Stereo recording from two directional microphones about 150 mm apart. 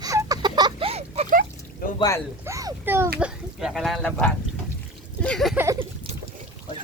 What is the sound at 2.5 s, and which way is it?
Speech, 20° right (ahead or behind).